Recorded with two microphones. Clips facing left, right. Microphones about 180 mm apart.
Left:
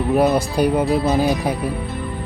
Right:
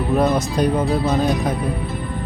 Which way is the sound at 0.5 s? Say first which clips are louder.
Left 1 dB; 10° left (ahead or behind).